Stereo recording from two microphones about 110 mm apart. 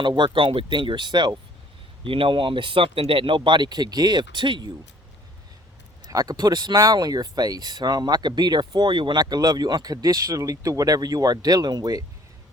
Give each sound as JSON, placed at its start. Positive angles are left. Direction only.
{"t": 0.2, "sound": "speech", "side_deg": -50}
{"t": 6.1, "sound": "speech", "side_deg": -35}